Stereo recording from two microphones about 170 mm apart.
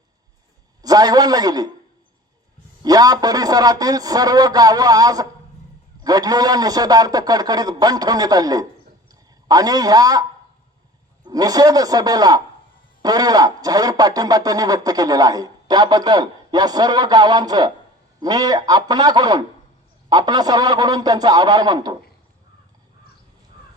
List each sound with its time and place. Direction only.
0.8 s speech: 20° right (ahead or behind)
2.8 s speech: 20° right (ahead or behind)